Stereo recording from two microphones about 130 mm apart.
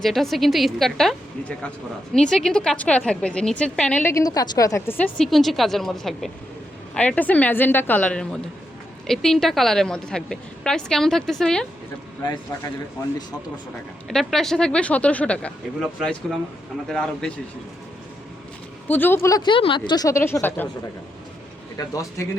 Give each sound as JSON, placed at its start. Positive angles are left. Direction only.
{"t": 0.0, "sound": "a woman's voice", "side_deg": 0}
{"t": 4.1, "sound": "a woman's voice", "side_deg": 30}
{"t": 14.1, "sound": "a woman's voice", "side_deg": 0}
{"t": 16.9, "sound": "a woman's voice", "side_deg": 5}
{"t": 18.9, "sound": "a woman's voice", "side_deg": 15}
{"t": 19.4, "sound": "speech", "side_deg": 40}
{"t": 19.9, "sound": "speech", "side_deg": 25}
{"t": 21.8, "sound": "speech", "side_deg": 25}